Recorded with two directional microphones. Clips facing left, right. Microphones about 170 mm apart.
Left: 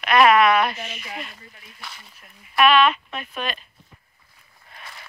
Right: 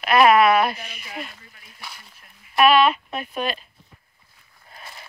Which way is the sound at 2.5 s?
35° right (ahead or behind).